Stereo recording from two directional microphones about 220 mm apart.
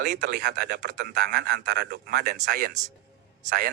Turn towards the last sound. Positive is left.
turn(degrees=-40)  # may be behind; listen again after turning